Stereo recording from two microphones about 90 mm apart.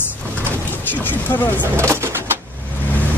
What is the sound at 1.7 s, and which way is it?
Speech, 30° right (ahead or behind).